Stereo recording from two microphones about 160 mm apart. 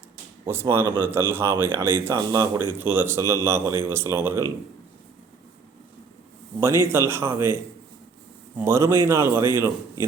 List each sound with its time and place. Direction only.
0.4 s a man's voice: 15° right (ahead or behind)
6.6 s a man's voice: 15° right (ahead or behind)